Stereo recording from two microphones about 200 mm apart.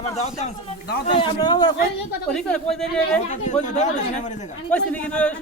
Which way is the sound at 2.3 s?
5° left (ahead or behind).